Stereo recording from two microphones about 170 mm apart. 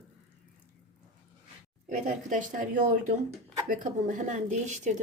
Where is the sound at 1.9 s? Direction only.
50° right (ahead or behind).